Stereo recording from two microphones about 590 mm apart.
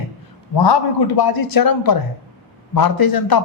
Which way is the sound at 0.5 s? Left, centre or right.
Left.